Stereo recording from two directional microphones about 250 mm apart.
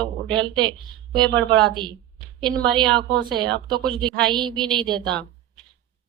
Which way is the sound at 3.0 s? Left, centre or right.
Centre.